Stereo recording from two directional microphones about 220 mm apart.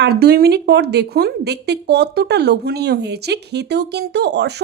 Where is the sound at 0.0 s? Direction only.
45° right (ahead or behind).